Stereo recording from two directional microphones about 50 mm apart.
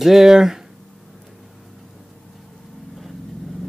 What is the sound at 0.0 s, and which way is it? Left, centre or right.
Speech, centre.